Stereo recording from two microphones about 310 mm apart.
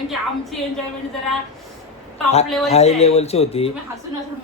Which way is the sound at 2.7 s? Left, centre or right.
Centre.